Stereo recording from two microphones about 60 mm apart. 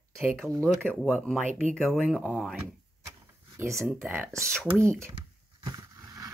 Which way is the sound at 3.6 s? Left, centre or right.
Right.